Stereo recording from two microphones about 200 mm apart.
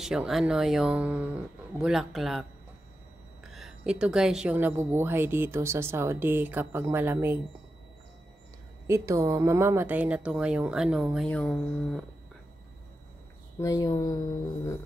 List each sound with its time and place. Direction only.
0.0 s speech: centre (ahead or behind)
3.5 s speech: 5° right (ahead or behind)
8.8 s speech: 15° right (ahead or behind); by 12.1 s 5° left (ahead or behind)
13.6 s speech: 15° left (ahead or behind)